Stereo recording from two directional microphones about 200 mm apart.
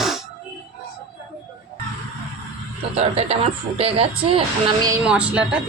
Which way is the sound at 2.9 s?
30° right (ahead or behind).